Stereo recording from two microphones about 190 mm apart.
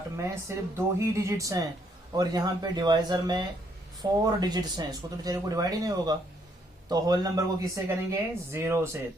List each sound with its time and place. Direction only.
0.2 s speech: 15° right (ahead or behind)